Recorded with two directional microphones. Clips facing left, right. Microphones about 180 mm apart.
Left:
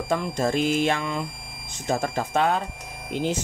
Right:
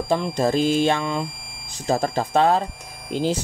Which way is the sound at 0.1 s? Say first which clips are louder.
Right 3 dB; 30° right (ahead or behind).